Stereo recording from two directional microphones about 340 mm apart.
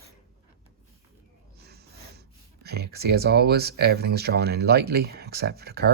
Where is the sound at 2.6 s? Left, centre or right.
Right.